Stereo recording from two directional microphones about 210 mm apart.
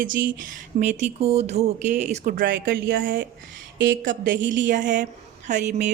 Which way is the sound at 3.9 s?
40° right (ahead or behind).